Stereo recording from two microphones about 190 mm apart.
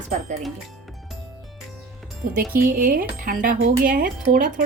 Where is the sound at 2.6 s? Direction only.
50° right (ahead or behind).